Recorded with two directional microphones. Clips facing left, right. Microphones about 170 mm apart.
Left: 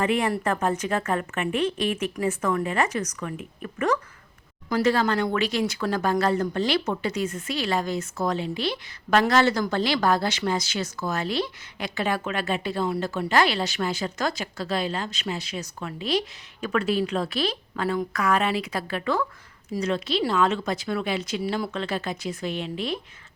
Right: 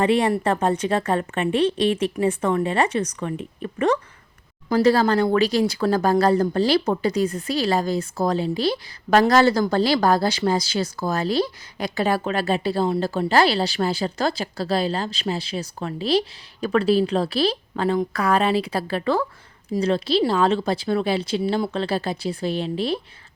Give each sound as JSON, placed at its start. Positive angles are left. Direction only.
{"t": 0.0, "sound": "speech", "side_deg": -30}